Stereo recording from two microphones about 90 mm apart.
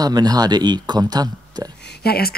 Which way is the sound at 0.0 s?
50° right (ahead or behind).